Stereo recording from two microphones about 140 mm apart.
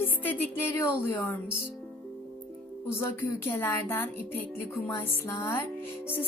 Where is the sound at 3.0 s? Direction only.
20° left (ahead or behind).